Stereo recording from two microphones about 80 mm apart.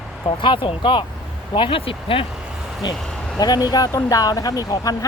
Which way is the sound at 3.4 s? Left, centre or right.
Left.